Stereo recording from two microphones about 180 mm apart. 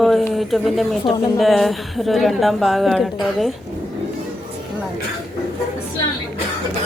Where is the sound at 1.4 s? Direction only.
Centre (ahead or behind).